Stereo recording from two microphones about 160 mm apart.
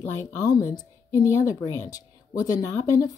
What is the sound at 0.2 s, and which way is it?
A woman's voice, 20° left (ahead or behind).